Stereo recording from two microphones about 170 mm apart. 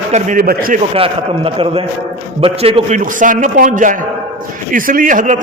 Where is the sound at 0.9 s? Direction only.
35° right (ahead or behind).